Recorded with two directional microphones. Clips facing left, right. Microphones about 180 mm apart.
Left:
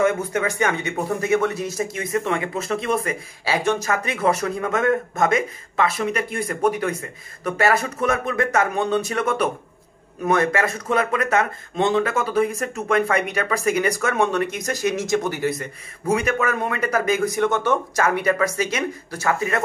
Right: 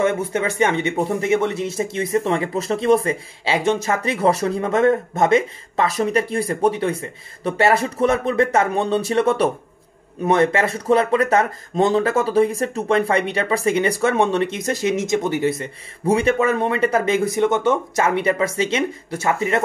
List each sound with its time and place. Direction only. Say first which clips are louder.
0.0 s speech: right 1 dB; 25° right (ahead or behind)